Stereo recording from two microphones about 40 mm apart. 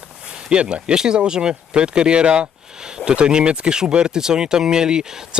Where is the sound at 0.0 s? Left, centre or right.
Right.